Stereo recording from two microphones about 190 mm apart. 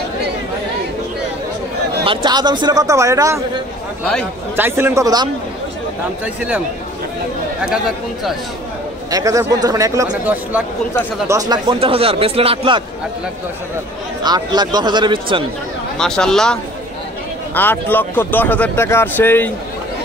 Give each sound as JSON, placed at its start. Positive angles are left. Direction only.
{"t": 2.0, "sound": "speech", "side_deg": -20}
{"t": 6.2, "sound": "speech", "side_deg": -5}
{"t": 7.7, "sound": "speech", "side_deg": 0}
{"t": 9.1, "sound": "speech", "side_deg": -15}
{"t": 14.2, "sound": "speech", "side_deg": -20}
{"t": 16.0, "sound": "speech", "side_deg": 5}
{"t": 17.6, "sound": "speech", "side_deg": 10}